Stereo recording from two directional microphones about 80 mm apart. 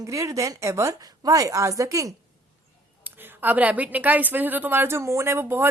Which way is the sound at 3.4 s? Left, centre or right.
Centre.